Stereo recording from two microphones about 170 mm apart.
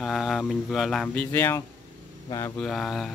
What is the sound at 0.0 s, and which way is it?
Speech, centre (ahead or behind).